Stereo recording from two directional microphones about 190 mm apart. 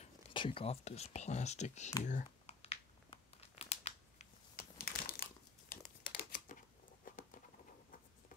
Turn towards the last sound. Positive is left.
turn(degrees=45)  # may be behind; listen again after turning